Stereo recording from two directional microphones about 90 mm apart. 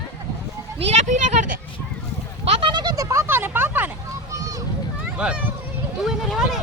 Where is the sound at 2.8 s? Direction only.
45° right (ahead or behind); by 3.9 s 20° right (ahead or behind).